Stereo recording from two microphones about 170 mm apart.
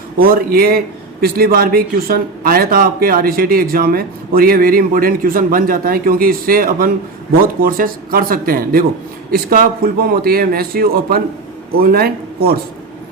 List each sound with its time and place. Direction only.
0.2 s speech: 60° right (ahead or behind)